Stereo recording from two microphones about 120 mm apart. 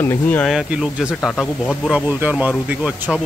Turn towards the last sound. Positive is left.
turn(degrees=-10)  # may be behind; listen again after turning